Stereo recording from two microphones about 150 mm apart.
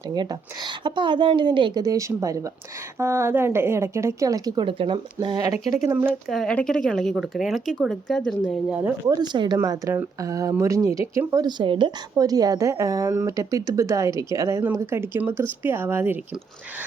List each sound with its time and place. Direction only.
0.1 s a woman's voice: 25° right (ahead or behind)
4.6 s speech: 35° right (ahead or behind)
5.9 s a woman's voice: 10° right (ahead or behind)
6.2 s speech: 5° left (ahead or behind)
9.0 s a woman's voice: 30° right (ahead or behind)
9.6 s a woman's voice: 20° right (ahead or behind)